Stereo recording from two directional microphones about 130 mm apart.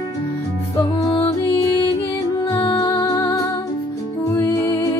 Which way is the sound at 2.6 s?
35° left (ahead or behind).